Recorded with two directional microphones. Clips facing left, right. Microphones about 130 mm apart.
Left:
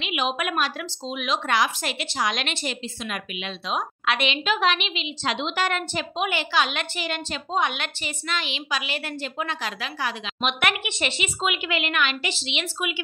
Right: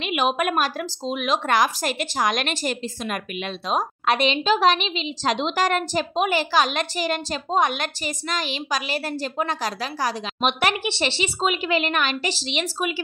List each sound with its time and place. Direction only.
0.0 s a woman's voice: 50° right (ahead or behind)